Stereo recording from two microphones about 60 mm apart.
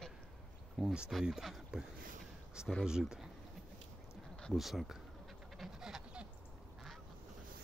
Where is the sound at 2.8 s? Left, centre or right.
Centre.